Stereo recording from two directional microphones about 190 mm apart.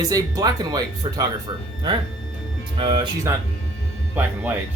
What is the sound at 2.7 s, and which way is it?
Speech, 25° right (ahead or behind).